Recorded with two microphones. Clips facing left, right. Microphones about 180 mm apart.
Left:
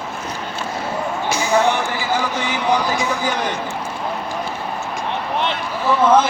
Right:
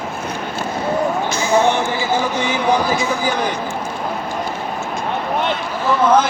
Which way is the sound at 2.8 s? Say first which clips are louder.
Right 2 dB; 15° left (ahead or behind).